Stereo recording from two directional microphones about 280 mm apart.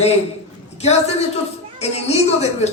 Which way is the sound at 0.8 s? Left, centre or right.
Left.